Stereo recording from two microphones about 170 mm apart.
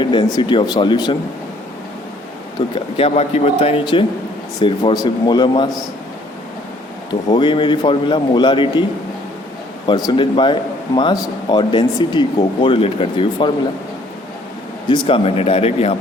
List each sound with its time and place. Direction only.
0.0 s speech: 25° left (ahead or behind)
2.6 s speech: 35° left (ahead or behind)
7.3 s speech: 25° left (ahead or behind)
10.1 s speech: 30° left (ahead or behind)
14.8 s speech: 30° left (ahead or behind)